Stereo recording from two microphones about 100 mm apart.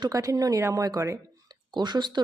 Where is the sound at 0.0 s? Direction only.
35° right (ahead or behind).